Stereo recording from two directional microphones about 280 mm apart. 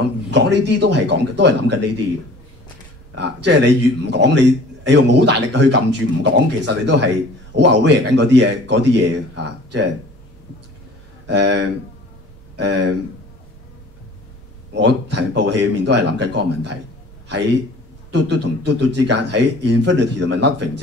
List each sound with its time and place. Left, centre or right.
0.3 s a man's voice: right
3.4 s a man's voice: right
11.2 s a man's voice: right
14.7 s a man's voice: right
18.1 s a man's voice: right